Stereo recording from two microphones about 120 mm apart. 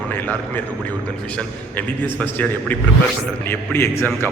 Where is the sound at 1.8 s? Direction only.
15° left (ahead or behind).